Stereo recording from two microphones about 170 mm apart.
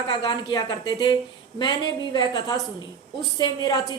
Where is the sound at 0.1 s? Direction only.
30° left (ahead or behind).